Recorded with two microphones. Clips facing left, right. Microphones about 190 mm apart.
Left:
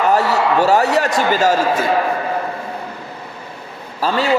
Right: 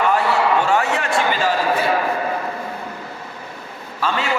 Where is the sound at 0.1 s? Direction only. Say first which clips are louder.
Left 2 dB; 40° left (ahead or behind).